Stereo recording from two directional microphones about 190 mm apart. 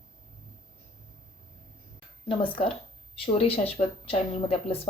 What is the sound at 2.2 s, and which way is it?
A woman's voice, 25° left (ahead or behind).